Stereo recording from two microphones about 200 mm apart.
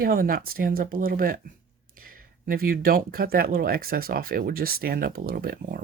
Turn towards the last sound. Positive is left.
turn(degrees=-50)  # may be behind; listen again after turning